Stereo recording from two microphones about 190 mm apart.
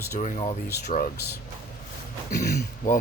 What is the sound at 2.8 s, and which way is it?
Speech, 45° left (ahead or behind).